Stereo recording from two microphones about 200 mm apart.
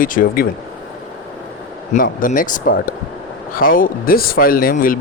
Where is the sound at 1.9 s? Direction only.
45° left (ahead or behind).